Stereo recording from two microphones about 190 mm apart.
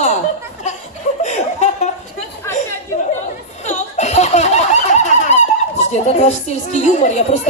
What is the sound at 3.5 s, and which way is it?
Laughter, 35° left (ahead or behind).